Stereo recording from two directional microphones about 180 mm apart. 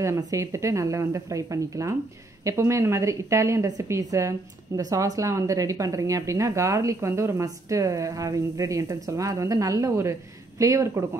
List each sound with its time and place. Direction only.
0.0 s a woman's voice: 15° right (ahead or behind)